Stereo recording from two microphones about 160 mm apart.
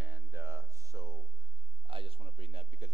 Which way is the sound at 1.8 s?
35° right (ahead or behind).